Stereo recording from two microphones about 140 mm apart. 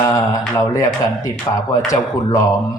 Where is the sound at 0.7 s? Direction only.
25° left (ahead or behind).